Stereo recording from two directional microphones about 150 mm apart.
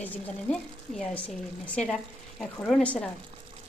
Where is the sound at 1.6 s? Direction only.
5° left (ahead or behind).